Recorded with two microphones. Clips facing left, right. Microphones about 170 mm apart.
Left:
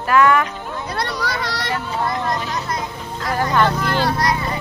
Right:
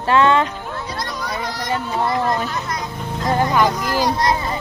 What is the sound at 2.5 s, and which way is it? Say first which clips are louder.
Speech: left 1 dB; 30° left (ahead or behind).